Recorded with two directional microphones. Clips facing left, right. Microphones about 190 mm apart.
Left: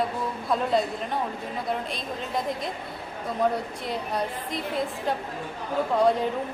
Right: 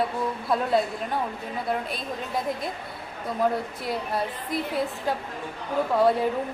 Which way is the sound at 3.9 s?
5° right (ahead or behind).